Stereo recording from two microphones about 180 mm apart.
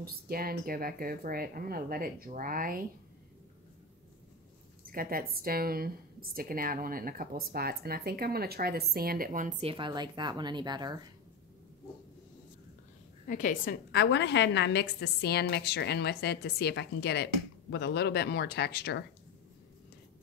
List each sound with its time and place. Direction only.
0.0 s speech: 55° right (ahead or behind)
4.9 s speech: 55° right (ahead or behind)
9.7 s a woman's voice: 25° right (ahead or behind)
13.3 s a woman's voice: 45° left (ahead or behind)
13.9 s a woman's voice: 75° left (ahead or behind)